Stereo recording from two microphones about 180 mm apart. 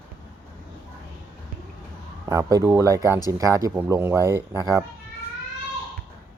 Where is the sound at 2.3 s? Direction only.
20° right (ahead or behind).